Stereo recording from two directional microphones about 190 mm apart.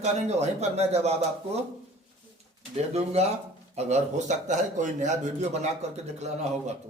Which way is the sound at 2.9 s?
35° right (ahead or behind).